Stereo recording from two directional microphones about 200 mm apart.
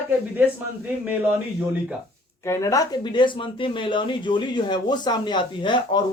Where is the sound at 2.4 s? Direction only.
15° left (ahead or behind).